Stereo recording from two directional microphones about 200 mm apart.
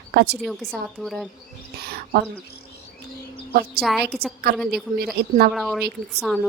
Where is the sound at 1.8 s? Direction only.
50° right (ahead or behind).